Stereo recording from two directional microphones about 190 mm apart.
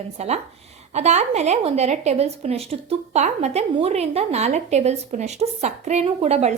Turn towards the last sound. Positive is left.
turn(degrees=-35)  # may be behind; listen again after turning